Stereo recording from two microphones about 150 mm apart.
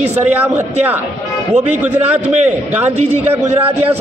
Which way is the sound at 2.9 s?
45° right (ahead or behind).